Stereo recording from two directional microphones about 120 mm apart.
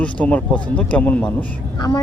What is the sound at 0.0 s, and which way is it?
Speech, 10° left (ahead or behind).